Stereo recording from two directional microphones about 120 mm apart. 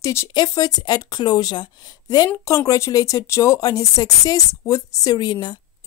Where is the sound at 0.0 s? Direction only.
25° left (ahead or behind).